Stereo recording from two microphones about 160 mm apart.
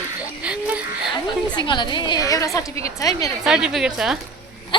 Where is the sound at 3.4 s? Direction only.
5° right (ahead or behind).